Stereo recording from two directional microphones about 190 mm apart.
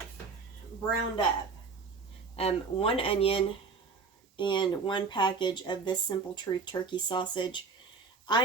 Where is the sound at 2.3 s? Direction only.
30° left (ahead or behind).